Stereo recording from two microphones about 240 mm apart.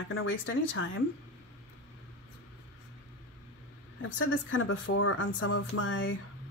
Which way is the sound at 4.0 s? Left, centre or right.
Left.